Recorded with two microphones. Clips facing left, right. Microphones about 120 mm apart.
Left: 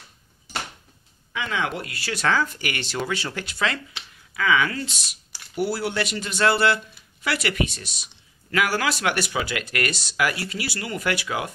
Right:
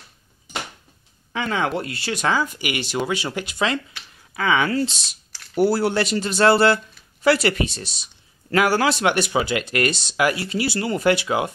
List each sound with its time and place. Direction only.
1.3 s speech: 35° right (ahead or behind); by 3.8 s 20° right (ahead or behind)
4.3 s speech: 30° right (ahead or behind)
5.6 s speech: 40° right (ahead or behind); by 11.5 s 25° right (ahead or behind)